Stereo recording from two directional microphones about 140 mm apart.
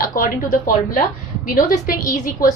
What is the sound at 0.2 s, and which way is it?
A woman's voice, 85° left.